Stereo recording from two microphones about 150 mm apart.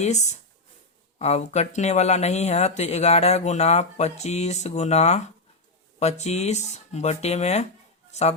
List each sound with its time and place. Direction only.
0.0 s speech: 50° left (ahead or behind)